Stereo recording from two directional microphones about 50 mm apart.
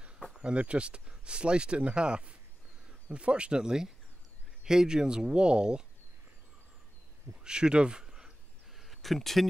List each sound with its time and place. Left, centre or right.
0.4 s speech: right
7.4 s speech: centre
8.7 s a sound: centre